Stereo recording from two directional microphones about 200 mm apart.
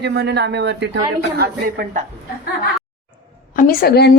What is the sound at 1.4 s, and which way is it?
Speech, 45° right (ahead or behind).